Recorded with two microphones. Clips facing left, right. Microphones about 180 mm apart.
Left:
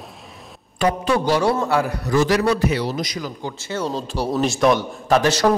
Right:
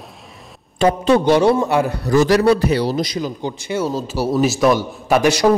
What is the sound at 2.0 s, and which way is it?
A man's voice, 35° right (ahead or behind).